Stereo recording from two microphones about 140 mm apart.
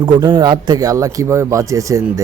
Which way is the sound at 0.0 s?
30° right (ahead or behind).